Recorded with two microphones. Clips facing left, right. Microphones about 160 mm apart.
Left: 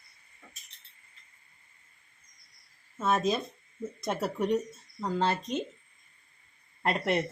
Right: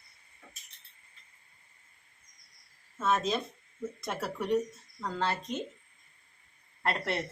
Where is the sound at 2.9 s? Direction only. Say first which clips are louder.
Left 2 dB; 15° left (ahead or behind).